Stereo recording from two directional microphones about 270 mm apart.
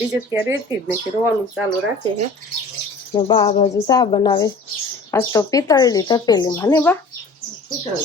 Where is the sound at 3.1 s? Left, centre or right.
Centre.